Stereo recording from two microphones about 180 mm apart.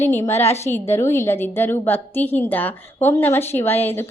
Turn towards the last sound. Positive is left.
turn(degrees=10)  # may be behind; listen again after turning